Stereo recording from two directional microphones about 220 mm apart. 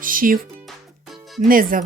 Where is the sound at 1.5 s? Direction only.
40° right (ahead or behind).